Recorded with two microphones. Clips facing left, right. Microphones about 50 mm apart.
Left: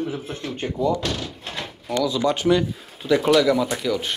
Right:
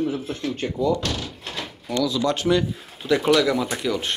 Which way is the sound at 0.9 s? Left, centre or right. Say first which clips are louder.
Even; centre.